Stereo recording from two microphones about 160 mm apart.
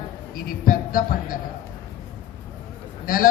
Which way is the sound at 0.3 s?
65° left (ahead or behind).